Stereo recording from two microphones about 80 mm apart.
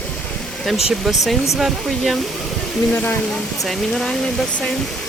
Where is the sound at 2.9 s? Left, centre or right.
Left.